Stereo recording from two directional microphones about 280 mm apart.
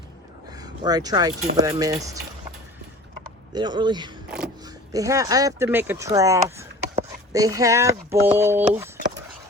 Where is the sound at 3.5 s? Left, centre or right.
Centre.